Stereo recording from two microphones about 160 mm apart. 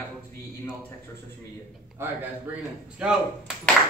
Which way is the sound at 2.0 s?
15° right (ahead or behind).